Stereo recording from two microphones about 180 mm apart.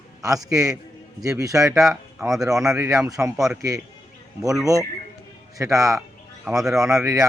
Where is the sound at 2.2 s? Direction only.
Centre (ahead or behind).